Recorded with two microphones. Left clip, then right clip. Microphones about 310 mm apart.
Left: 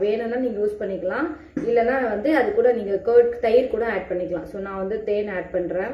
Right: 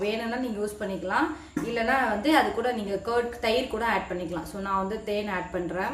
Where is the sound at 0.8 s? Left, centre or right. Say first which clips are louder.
Left 2 dB; centre.